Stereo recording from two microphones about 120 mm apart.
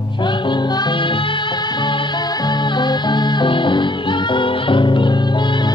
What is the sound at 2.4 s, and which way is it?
Music, 35° left (ahead or behind).